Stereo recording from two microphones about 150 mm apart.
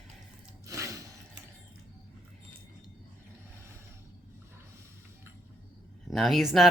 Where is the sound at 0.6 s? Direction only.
20° right (ahead or behind).